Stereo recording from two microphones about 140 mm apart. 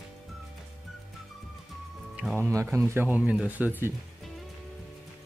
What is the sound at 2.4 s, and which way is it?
Speech, 20° right (ahead or behind).